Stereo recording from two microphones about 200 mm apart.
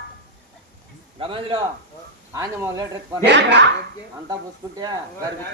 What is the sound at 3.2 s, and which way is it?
Speech, 60° right (ahead or behind).